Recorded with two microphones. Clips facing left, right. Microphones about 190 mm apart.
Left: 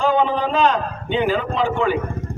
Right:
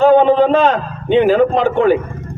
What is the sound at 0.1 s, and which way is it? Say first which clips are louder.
A man's voice: right 9 dB; 55° right (ahead or behind).